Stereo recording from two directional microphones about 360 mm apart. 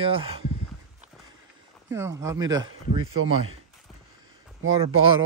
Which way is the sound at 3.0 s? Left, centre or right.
Right.